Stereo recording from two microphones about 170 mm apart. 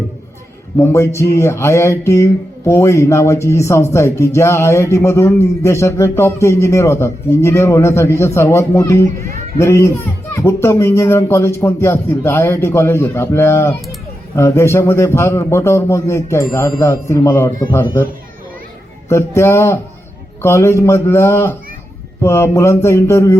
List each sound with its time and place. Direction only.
0.8 s a man's voice: 15° left (ahead or behind)